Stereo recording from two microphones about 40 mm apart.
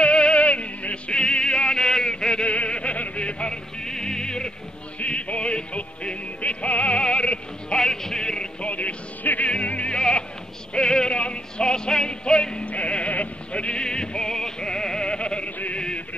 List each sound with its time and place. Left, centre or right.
0.0 s music: left
1.2 s music: centre
2.4 s a sound: left
3.8 s music: centre
7.8 s a sound: centre
8.6 s music: left; by 15.0 s centre
15.0 s opera: left